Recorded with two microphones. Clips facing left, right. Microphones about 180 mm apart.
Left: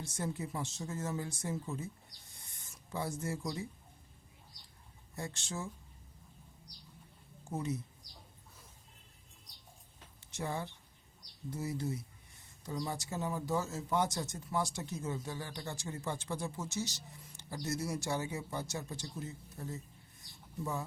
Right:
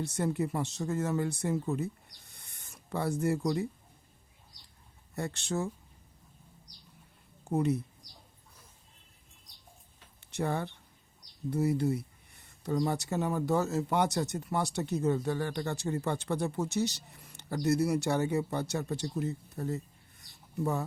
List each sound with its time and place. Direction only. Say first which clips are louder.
0.0 s speech: right 8 dB; 65° right (ahead or behind)
5.1 s speech: right 8 dB; 65° right (ahead or behind)
7.5 s speech: right 9 dB; 60° right (ahead or behind)
10.2 s speech: right 6 dB; 60° right (ahead or behind)